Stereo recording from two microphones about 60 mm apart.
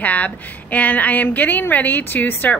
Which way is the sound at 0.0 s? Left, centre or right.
Left.